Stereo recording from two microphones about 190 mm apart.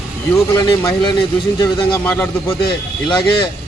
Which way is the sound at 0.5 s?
20° left (ahead or behind).